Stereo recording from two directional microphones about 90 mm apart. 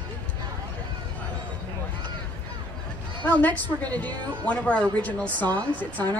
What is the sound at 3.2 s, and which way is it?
A woman's voice, 15° left (ahead or behind).